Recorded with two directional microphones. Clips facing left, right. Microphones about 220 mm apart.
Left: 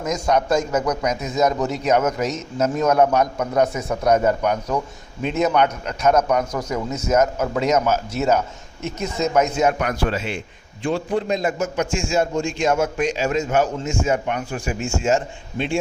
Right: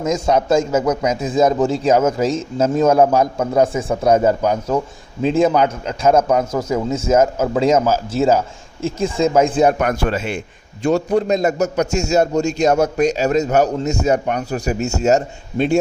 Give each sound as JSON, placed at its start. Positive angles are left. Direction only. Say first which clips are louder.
{"t": 0.0, "sound": "a man's voice", "louder": "right 3 dB", "side_deg": -25}
{"t": 9.7, "sound": "a man's voice", "louder": "right 4 dB", "side_deg": -50}